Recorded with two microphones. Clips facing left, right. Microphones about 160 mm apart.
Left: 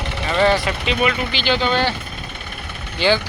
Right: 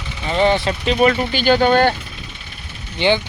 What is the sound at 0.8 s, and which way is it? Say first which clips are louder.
Speech: right 7 dB; 40° right (ahead or behind).